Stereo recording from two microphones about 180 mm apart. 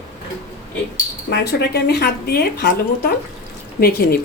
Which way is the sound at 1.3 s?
70° left (ahead or behind).